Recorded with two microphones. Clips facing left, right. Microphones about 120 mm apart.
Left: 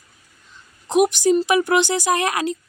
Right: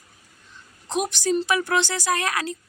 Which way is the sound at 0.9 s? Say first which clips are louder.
Left 8 dB; 15° left (ahead or behind).